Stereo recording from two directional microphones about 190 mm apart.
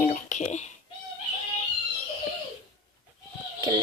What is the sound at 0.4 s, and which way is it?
Speech, 35° left (ahead or behind).